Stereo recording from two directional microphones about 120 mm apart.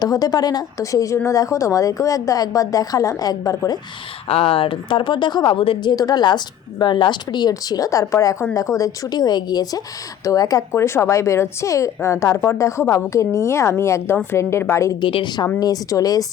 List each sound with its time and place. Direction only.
0.0 s a woman's voice: 30° left (ahead or behind)
4.3 s a woman's voice: 50° left (ahead or behind); by 14.9 s 25° left (ahead or behind)
15.0 s a woman's voice: 40° left (ahead or behind)
15.6 s a woman's voice: 30° left (ahead or behind)